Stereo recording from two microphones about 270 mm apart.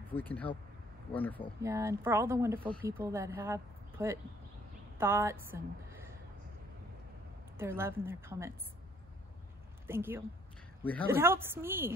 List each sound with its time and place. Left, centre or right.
0.1 s speech: centre
1.6 s a woman's voice: centre
7.5 s speech: centre
9.8 s speech: centre
10.8 s speech: centre
11.1 s speech: centre